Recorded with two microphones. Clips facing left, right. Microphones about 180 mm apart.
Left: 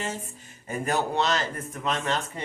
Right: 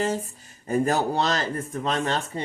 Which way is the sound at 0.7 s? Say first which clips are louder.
Right 5 dB; 35° right (ahead or behind).